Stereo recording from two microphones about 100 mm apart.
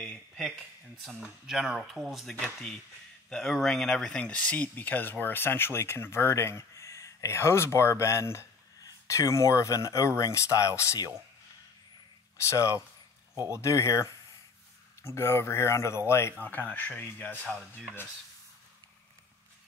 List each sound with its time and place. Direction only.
1.2 s speech: 5° right (ahead or behind); by 10.7 s 30° left (ahead or behind)
12.4 s speech: 30° left (ahead or behind); by 17.8 s 15° left (ahead or behind)